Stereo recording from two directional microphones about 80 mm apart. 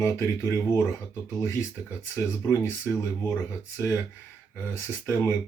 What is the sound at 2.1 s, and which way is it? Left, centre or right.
Speech, left.